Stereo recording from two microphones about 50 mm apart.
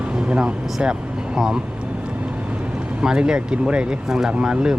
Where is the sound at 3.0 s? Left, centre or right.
Centre.